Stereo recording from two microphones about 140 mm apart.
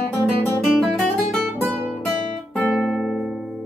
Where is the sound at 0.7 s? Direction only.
Centre (ahead or behind).